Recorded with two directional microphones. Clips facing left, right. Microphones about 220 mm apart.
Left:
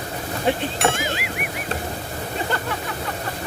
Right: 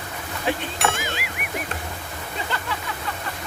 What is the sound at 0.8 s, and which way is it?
Music, centre (ahead or behind).